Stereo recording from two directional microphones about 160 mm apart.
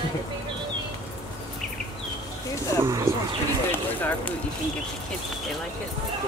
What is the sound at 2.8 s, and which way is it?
Speech, 15° right (ahead or behind).